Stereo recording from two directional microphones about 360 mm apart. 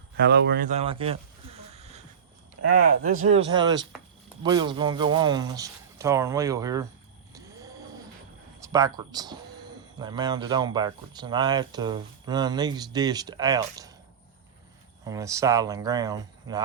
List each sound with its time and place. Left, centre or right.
0.2 s speech: right
1.7 s a sound: centre
2.9 s speech: right
7.3 s a sound: centre
8.7 s speech: centre
15.0 s speech: centre